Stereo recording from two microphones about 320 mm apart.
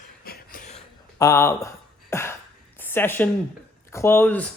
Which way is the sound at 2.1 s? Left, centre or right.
Centre.